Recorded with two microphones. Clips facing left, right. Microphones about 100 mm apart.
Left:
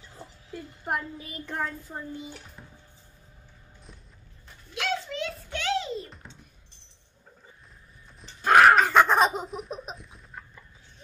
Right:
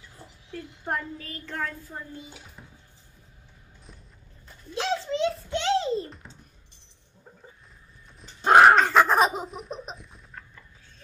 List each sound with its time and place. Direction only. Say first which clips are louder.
0.5 s a child's voice: even; 10° left (ahead or behind)
2.3 s dishes: left 1 dB; 5° right (ahead or behind)
4.7 s a sound: right 3 dB; 30° right (ahead or behind)
6.2 s a sound: even; centre (ahead or behind)
8.4 s dog: right 2 dB; 25° right (ahead or behind)
8.7 s laughter: even; centre (ahead or behind)